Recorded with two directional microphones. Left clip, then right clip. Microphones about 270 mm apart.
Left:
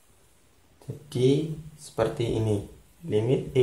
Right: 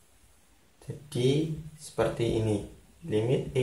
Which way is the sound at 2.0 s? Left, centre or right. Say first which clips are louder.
Left 1 dB; left.